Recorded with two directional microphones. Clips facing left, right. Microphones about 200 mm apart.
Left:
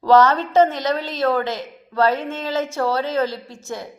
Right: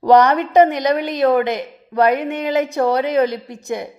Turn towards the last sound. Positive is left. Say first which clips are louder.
# right 6 dB
turn(degrees=-15)  # may be behind; listen again after turning